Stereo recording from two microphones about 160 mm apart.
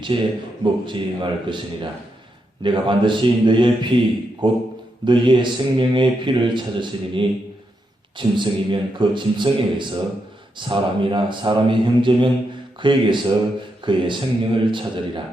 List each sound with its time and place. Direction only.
0.1 s a man's voice: 30° right (ahead or behind)